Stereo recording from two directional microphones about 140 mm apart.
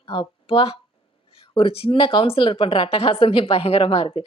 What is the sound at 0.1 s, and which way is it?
Speech, 40° left (ahead or behind).